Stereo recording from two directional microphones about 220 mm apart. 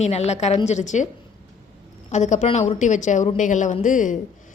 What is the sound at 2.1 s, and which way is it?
A woman's voice, 30° left (ahead or behind).